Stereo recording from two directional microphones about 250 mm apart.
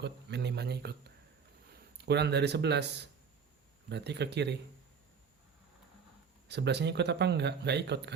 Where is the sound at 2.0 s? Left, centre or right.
Right.